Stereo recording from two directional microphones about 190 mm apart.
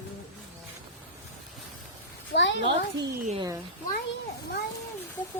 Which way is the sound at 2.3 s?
70° left (ahead or behind).